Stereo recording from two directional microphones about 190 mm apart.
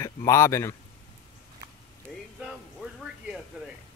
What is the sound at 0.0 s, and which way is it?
Speech, 15° left (ahead or behind).